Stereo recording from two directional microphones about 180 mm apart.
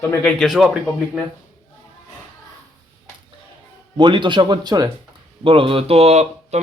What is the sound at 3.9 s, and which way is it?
Speech, 25° right (ahead or behind).